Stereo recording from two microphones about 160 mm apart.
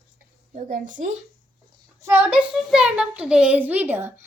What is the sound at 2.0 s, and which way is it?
A child's voice, 15° right (ahead or behind).